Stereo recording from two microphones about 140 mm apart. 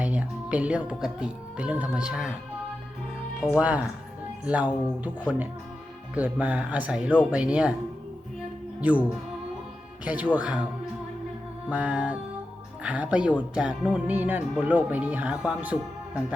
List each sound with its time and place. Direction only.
0.0 s speech: 10° right (ahead or behind)
3.5 s speech: 10° right (ahead or behind)
6.4 s speech: 10° right (ahead or behind)
8.8 s speech: 10° right (ahead or behind)
11.7 s speech: 10° right (ahead or behind)